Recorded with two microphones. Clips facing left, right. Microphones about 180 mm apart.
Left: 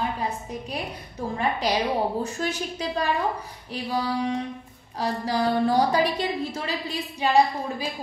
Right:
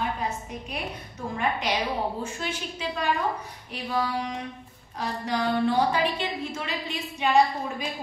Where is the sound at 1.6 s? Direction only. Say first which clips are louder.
Left 4 dB; 35° left (ahead or behind).